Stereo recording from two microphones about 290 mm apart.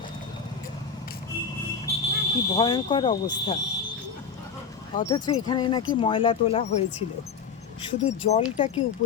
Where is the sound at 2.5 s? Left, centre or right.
Centre.